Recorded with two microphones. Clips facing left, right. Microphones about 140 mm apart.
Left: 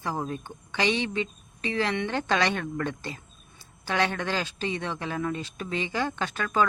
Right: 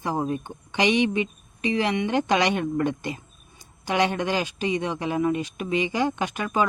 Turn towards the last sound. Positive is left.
turn(degrees=-15)  # may be behind; listen again after turning